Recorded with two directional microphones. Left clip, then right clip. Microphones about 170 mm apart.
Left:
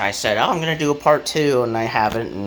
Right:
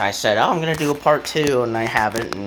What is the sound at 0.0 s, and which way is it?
Speech, 15° right (ahead or behind).